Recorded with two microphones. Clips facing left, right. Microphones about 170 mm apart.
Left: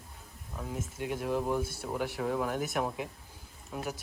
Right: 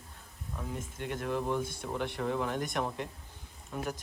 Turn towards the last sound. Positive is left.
turn(degrees=5)  # may be behind; listen again after turning